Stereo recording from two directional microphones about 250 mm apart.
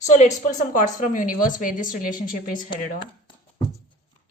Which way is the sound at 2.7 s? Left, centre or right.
Centre.